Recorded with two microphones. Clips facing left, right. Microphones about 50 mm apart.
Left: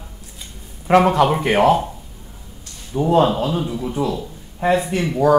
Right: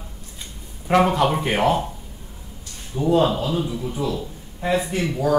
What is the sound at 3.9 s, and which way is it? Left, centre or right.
Speech, left.